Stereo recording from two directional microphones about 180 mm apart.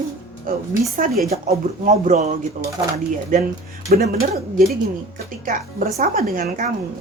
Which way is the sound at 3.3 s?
45° right (ahead or behind).